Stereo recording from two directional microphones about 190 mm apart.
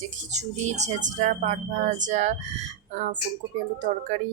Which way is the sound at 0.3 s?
40° right (ahead or behind).